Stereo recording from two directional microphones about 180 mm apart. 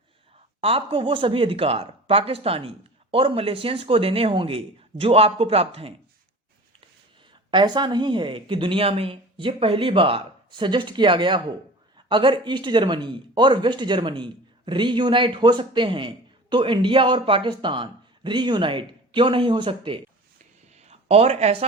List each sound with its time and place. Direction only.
0.6 s speech: 30° right (ahead or behind)
7.5 s speech: 25° right (ahead or behind)
20.7 s a sound: 35° right (ahead or behind)